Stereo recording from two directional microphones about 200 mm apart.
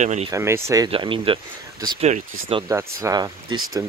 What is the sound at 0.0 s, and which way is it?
Speech, 35° right (ahead or behind).